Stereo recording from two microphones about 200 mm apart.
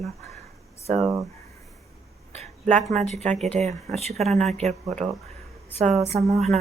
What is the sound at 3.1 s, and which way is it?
Speech, 35° right (ahead or behind).